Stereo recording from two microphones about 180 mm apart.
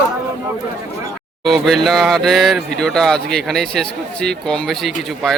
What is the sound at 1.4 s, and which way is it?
Speech, centre (ahead or behind).